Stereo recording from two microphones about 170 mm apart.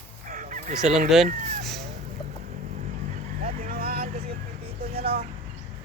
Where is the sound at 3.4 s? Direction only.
60° right (ahead or behind).